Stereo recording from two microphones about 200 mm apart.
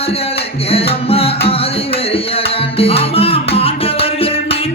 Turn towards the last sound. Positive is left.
turn(degrees=30)  # may be behind; listen again after turning